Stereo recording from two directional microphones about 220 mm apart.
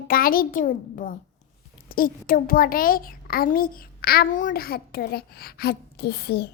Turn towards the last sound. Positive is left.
turn(degrees=45)  # may be behind; listen again after turning